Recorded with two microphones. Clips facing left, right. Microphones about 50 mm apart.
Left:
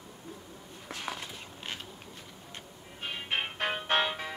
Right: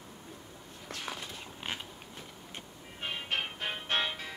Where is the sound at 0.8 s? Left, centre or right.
Centre.